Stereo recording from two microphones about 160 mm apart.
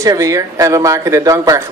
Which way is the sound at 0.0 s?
20° right (ahead or behind).